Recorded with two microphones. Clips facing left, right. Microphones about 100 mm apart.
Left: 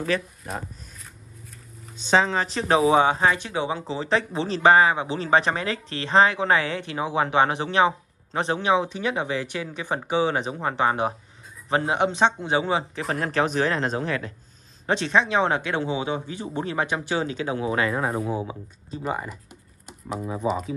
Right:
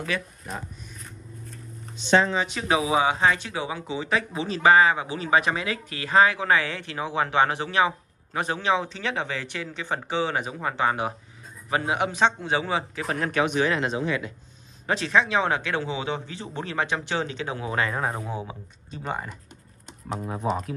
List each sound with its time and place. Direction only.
0.1 s speech: 35° left (ahead or behind)
2.3 s speech: 35° left (ahead or behind)
14.9 s speech: 25° left (ahead or behind)
17.9 s speech: 5° left (ahead or behind)
19.9 s a sound: centre (ahead or behind)
20.4 s speech: 5° left (ahead or behind)